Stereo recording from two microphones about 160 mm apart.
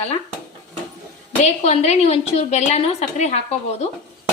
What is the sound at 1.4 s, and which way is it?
A woman's voice, 45° left (ahead or behind).